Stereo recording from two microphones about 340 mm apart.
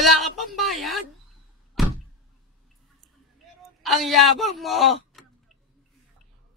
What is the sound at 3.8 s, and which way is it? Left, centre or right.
Speech, centre.